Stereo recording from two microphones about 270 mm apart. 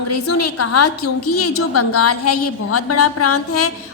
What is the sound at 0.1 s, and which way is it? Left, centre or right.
A woman's voice, left.